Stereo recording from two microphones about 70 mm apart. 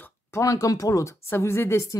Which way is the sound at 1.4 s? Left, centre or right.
Left.